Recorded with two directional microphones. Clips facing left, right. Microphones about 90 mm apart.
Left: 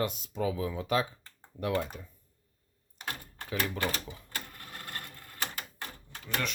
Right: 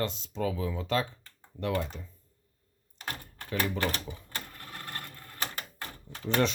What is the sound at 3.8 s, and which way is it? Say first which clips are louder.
Speech: right 2 dB; 20° left (ahead or behind).